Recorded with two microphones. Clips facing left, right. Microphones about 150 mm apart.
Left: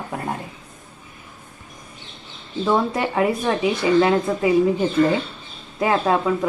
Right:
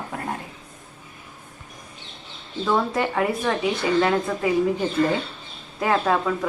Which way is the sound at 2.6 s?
15° left (ahead or behind).